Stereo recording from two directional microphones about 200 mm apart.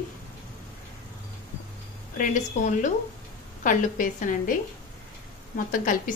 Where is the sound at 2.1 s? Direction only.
40° left (ahead or behind).